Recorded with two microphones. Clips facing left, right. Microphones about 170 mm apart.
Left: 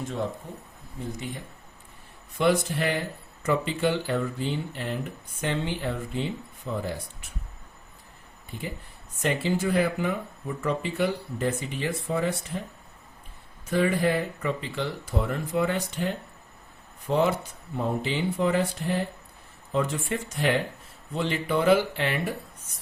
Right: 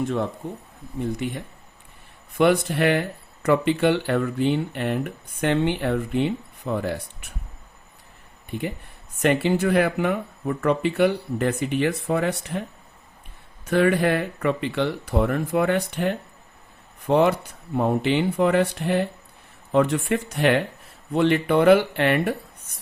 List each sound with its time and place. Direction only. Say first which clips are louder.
0.0 s speech: right 6 dB; 65° right (ahead or behind)
8.4 s speech: right 7 dB; 60° right (ahead or behind)
13.7 s speech: right 4 dB; 70° right (ahead or behind)